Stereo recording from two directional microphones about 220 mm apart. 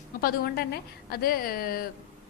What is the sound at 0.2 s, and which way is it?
A woman's voice, 45° left (ahead or behind).